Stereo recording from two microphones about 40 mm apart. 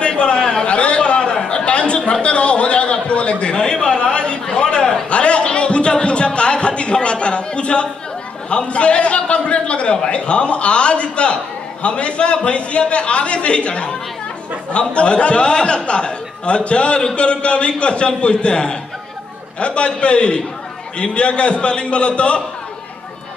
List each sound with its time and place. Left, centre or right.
0.0 s a sound: left
8.5 s speech: left
15.0 s speech: left